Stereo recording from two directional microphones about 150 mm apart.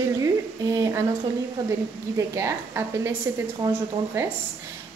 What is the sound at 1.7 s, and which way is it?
A woman's voice, 20° right (ahead or behind).